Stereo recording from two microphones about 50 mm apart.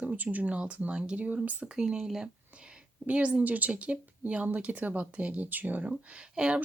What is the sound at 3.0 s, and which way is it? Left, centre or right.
Speech, right.